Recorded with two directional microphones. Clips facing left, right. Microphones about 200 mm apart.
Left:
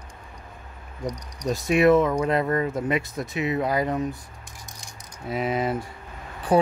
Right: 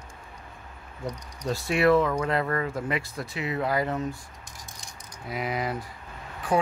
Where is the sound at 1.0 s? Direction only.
15° left (ahead or behind).